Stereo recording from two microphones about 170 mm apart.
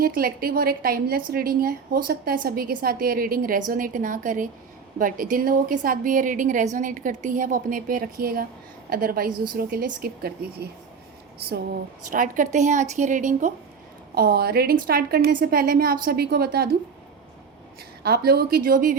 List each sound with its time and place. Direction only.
0.0 s a woman's voice: 60° right (ahead or behind)
12.1 s a woman's voice: 50° right (ahead or behind)
14.2 s a woman's voice: 65° right (ahead or behind)
18.0 s a woman's voice: 65° right (ahead or behind)